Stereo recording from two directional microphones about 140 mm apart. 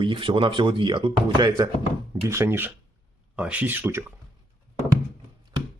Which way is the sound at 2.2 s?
20° right (ahead or behind).